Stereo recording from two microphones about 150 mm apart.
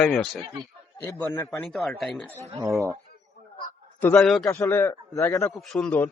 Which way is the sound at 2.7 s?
Centre (ahead or behind).